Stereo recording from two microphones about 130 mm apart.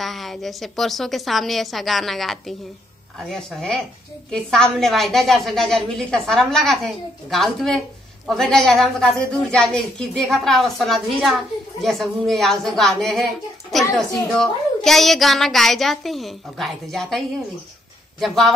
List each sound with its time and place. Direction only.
0.0 s a woman's voice: centre (ahead or behind)
18.2 s a woman's voice: centre (ahead or behind)